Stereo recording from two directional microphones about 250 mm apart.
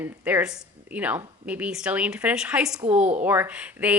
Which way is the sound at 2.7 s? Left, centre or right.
Right.